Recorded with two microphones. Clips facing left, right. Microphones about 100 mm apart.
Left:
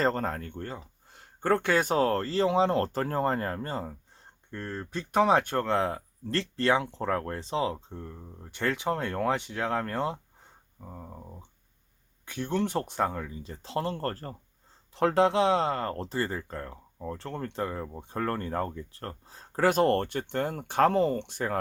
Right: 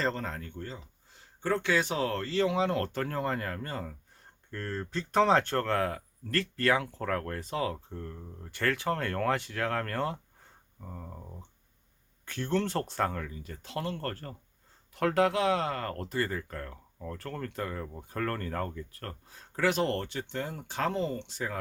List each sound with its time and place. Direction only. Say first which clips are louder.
0.0 s speech: left 5 dB; 45° left (ahead or behind); by 3.9 s 30° left (ahead or behind)
4.5 s speech: even; 15° left (ahead or behind)
10.8 s speech: left 1 dB; 10° left (ahead or behind); by 21.6 s 55° left (ahead or behind)